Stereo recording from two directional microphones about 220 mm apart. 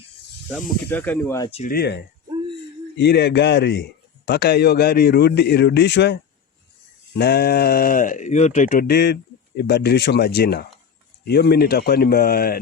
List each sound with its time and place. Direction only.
0.9 s speech: 10° left (ahead or behind)
1.5 s speech: 30° left (ahead or behind)
1.7 s a man's voice: 45° left (ahead or behind)
3.0 s a man's voice: 50° left (ahead or behind)
7.2 s a man's voice: 45° left (ahead or behind)